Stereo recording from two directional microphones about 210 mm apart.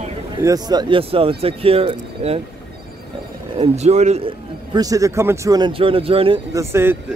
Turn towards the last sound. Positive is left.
turn(degrees=-10)  # may be behind; listen again after turning